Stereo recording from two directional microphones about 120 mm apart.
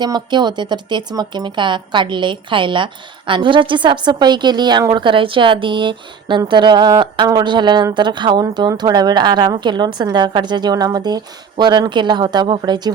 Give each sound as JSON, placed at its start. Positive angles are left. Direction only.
{"t": 0.0, "sound": "speech", "side_deg": -35}